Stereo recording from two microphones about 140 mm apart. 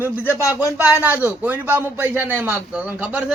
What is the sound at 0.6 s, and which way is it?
Speech, 20° left (ahead or behind).